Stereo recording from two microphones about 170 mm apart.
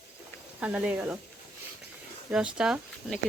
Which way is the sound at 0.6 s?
10° right (ahead or behind).